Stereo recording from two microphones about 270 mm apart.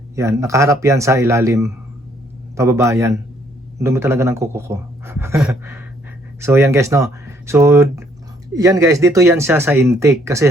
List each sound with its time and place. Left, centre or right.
0.2 s speech: centre